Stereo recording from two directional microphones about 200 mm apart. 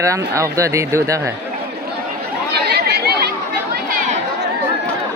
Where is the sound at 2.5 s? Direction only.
55° right (ahead or behind).